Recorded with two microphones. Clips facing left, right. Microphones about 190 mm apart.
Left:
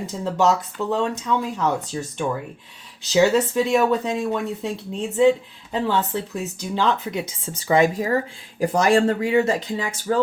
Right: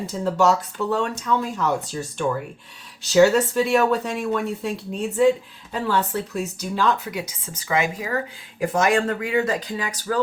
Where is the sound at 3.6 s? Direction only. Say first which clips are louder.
Even; 15° left (ahead or behind).